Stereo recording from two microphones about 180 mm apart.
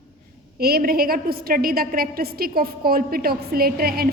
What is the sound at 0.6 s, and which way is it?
A woman's voice, 55° right (ahead or behind).